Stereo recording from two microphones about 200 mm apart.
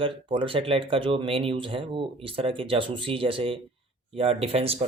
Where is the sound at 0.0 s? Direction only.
25° right (ahead or behind).